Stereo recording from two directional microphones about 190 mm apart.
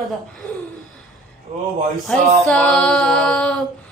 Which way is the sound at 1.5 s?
35° right (ahead or behind).